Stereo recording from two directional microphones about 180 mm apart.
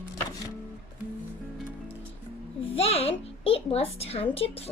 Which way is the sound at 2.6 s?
35° left (ahead or behind).